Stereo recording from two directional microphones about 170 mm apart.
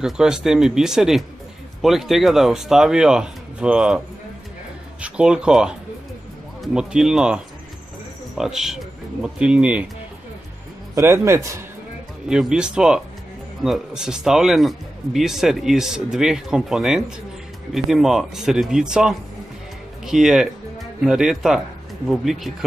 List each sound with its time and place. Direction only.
0.0 s a man's voice: 5° right (ahead or behind)
5.0 s a man's voice: 5° right (ahead or behind)
11.0 s a man's voice: 15° right (ahead or behind)
12.3 s a man's voice: 5° right (ahead or behind)